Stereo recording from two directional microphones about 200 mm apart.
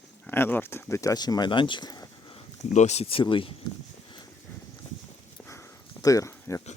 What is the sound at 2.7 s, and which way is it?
Speech, 35° left (ahead or behind).